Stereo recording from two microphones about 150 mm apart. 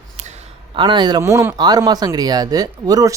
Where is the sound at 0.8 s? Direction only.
30° right (ahead or behind).